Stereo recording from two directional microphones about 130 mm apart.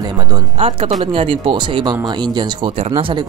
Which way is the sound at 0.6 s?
45° right (ahead or behind).